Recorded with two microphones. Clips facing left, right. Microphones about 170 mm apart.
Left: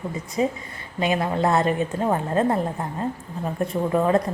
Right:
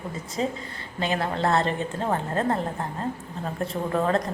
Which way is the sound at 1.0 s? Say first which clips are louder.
Left 4 dB; 15° left (ahead or behind).